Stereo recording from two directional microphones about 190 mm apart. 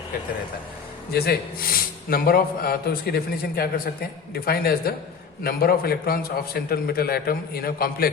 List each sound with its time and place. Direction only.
1.1 s a man's voice: 55° left (ahead or behind)